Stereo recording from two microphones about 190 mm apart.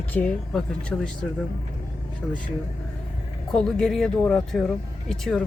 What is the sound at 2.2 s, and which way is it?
Speech, centre (ahead or behind).